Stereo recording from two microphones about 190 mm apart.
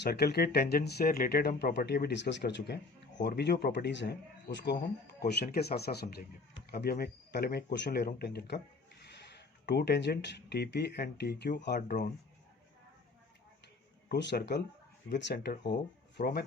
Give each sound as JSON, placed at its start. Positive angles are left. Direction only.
{"t": 0.0, "sound": "speech", "side_deg": 55}
{"t": 9.6, "sound": "speech", "side_deg": 60}
{"t": 14.1, "sound": "speech", "side_deg": 60}